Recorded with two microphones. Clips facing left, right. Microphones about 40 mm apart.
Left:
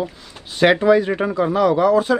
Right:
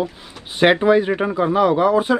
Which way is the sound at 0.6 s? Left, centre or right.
Centre.